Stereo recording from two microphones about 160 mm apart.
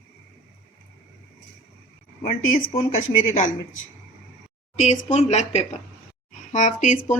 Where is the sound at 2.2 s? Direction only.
60° left (ahead or behind).